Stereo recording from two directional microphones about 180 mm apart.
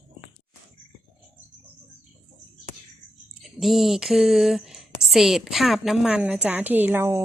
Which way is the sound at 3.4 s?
Centre (ahead or behind).